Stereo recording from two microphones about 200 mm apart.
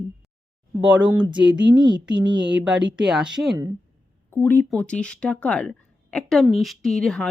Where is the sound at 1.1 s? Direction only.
25° right (ahead or behind).